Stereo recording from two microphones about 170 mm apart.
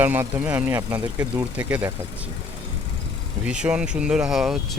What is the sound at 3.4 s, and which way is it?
Speech, 5° right (ahead or behind).